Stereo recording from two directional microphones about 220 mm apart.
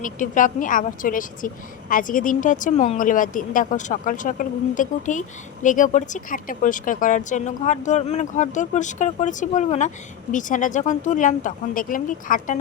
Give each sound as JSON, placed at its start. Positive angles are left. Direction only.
{"t": 0.0, "sound": "speech", "side_deg": 35}